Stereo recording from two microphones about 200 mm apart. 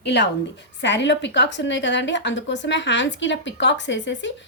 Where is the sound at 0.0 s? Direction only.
60° left (ahead or behind).